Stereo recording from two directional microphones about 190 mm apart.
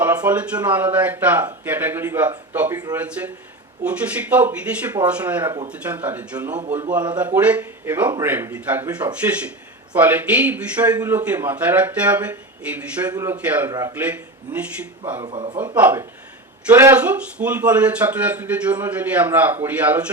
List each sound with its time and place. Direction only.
0.0 s a man's voice: 10° right (ahead or behind)
15.2 s speech: 25° right (ahead or behind)
15.7 s a man's voice: 10° right (ahead or behind)